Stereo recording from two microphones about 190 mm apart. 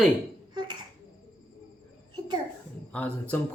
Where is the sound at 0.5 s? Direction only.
25° right (ahead or behind).